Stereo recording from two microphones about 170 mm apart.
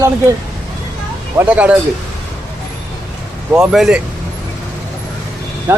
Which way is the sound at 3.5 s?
5° right (ahead or behind).